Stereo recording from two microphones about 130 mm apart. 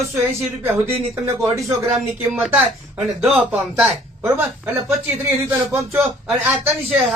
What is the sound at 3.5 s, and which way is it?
Speech, 10° right (ahead or behind).